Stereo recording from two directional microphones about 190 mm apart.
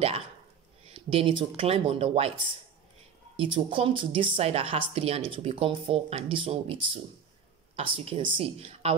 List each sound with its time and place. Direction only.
0.9 s speech: 30° right (ahead or behind)